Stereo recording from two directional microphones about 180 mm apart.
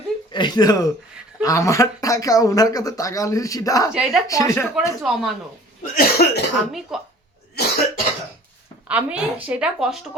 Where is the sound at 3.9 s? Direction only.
5° right (ahead or behind).